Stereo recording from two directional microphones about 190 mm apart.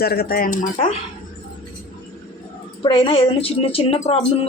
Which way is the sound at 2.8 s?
30° left (ahead or behind).